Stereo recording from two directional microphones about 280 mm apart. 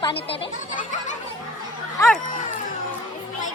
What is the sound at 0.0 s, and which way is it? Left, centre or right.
Speech, centre.